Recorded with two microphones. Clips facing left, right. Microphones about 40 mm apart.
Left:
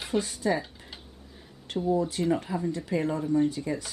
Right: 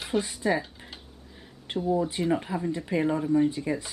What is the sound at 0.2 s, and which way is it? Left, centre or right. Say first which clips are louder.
Speech: right 1 dB; centre.